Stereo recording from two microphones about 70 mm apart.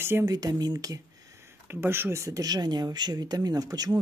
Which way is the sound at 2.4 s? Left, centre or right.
Right.